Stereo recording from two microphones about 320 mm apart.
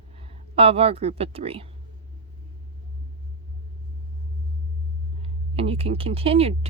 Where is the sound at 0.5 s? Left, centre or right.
Centre.